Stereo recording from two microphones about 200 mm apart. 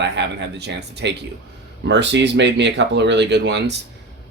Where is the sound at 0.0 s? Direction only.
60° right (ahead or behind).